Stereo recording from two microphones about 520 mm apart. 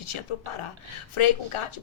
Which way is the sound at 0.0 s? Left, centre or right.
Left.